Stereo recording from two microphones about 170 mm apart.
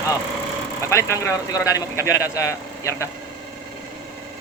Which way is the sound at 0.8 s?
15° left (ahead or behind).